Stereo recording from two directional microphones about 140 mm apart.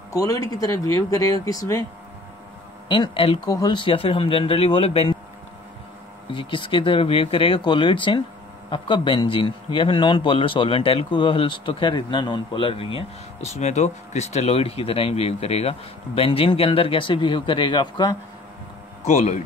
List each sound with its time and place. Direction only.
0.1 s speech: 25° left (ahead or behind)
2.9 s a man's voice: 40° left (ahead or behind)
3.4 s a man's voice: 25° left (ahead or behind); by 5.1 s 40° left (ahead or behind)
6.3 s a man's voice: 35° left (ahead or behind)
13.5 s a man's voice: 55° left (ahead or behind); by 18.1 s 30° left (ahead or behind)
19.1 s speech: 55° left (ahead or behind)